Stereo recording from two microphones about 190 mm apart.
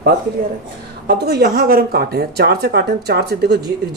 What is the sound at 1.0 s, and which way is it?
Speech, 55° right (ahead or behind).